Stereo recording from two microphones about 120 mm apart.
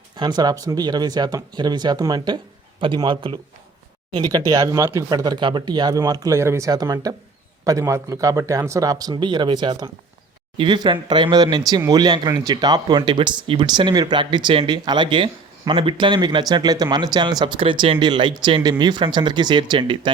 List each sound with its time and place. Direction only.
0.2 s a man's voice: 35° right (ahead or behind)